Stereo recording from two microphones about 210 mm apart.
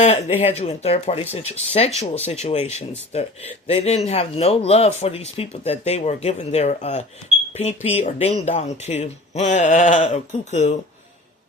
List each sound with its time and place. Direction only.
0.0 s speech: 30° left (ahead or behind)